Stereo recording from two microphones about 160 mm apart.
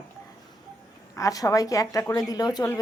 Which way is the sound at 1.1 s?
20° left (ahead or behind).